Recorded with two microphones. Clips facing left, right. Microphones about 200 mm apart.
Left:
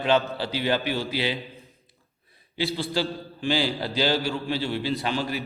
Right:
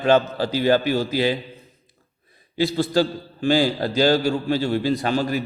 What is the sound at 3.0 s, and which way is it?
A man's voice, 45° right (ahead or behind).